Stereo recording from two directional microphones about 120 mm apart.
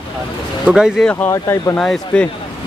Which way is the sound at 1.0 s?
15° left (ahead or behind).